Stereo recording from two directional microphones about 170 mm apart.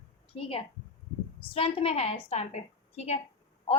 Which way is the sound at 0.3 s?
35° left (ahead or behind).